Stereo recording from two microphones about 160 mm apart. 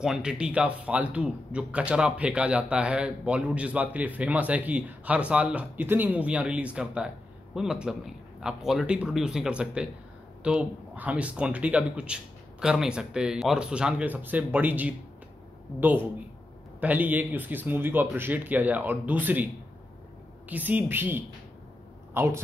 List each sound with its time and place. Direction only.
0.0 s a man's voice: 5° right (ahead or behind)
16.8 s a man's voice: 10° right (ahead or behind)